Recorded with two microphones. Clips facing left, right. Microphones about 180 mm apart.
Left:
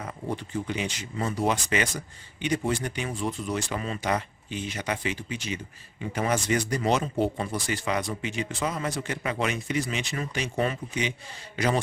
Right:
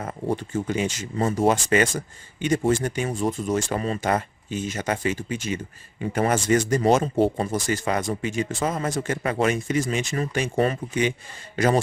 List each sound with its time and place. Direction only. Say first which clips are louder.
0.0 s speech: right 6 dB; 45° right (ahead or behind)